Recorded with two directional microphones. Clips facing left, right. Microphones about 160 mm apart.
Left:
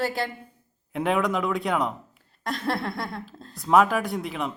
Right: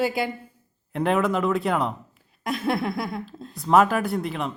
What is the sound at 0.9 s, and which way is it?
Speech, centre (ahead or behind).